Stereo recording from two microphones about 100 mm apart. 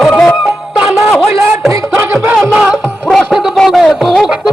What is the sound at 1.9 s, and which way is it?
Music, 20° right (ahead or behind).